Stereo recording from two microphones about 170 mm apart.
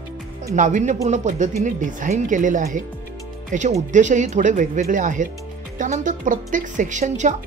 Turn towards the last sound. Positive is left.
turn(degrees=-45)  # may be behind; listen again after turning